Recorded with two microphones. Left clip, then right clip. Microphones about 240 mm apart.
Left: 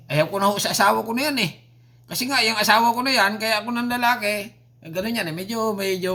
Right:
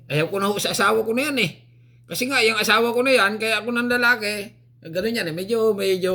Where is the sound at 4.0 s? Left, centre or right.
Centre.